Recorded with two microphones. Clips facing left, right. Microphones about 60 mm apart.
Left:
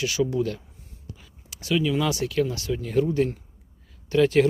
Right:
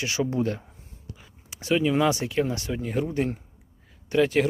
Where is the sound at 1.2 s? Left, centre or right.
Right.